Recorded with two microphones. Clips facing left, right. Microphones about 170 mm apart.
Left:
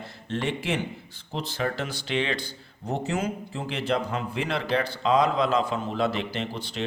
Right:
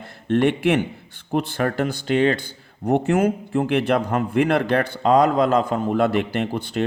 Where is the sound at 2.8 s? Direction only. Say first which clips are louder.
Right 10 dB; 55° right (ahead or behind).